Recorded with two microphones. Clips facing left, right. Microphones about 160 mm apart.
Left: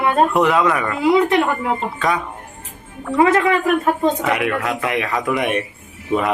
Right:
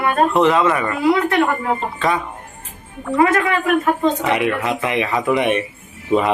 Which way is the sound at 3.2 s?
20° left (ahead or behind).